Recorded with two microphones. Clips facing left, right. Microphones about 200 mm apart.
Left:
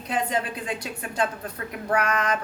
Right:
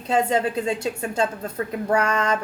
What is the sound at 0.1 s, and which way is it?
A woman's voice, 25° right (ahead or behind).